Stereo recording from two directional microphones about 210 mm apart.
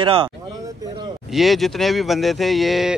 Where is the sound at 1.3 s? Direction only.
Centre (ahead or behind).